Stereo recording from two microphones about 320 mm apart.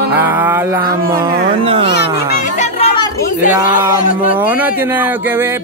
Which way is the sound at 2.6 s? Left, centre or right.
Centre.